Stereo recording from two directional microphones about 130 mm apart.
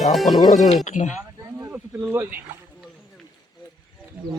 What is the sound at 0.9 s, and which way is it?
Speech, 70° left (ahead or behind).